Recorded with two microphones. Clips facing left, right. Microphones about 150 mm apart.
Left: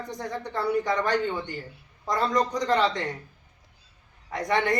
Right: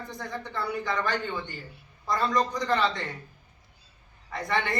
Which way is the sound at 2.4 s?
40° left (ahead or behind).